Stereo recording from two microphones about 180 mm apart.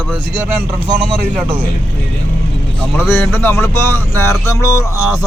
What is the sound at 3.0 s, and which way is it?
A man's voice, 10° left (ahead or behind).